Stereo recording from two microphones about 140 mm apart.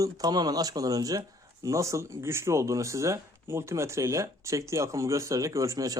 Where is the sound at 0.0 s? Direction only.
30° right (ahead or behind).